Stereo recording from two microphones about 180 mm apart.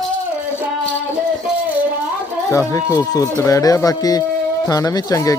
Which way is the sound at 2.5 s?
20° left (ahead or behind).